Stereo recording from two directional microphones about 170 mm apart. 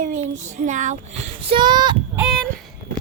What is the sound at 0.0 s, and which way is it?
Child singing, 45° right (ahead or behind).